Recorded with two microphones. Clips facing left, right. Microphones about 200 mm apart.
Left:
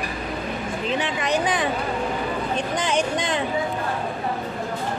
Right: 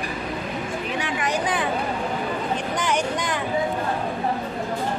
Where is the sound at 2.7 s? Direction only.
20° left (ahead or behind).